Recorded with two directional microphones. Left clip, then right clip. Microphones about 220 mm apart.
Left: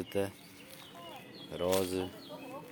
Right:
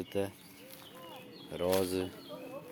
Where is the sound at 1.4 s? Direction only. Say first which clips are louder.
Even; 5° right (ahead or behind).